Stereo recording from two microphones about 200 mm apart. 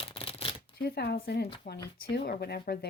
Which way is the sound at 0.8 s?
55° left (ahead or behind).